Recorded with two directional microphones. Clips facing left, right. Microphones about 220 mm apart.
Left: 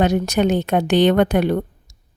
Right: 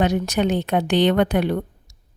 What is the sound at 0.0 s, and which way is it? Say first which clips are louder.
Speech: left 3 dB; 45° left (ahead or behind).